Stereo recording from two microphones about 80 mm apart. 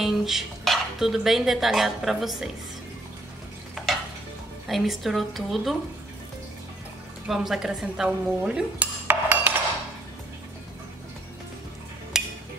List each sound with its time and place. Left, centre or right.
0.0 s dishes: centre
3.8 s stir: centre
4.6 s dishes: centre
7.2 s dishes: centre
9.0 s cutlery: right
12.1 s a sound: centre